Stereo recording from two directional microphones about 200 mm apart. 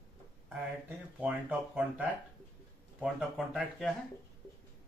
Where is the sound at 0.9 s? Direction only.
5° right (ahead or behind).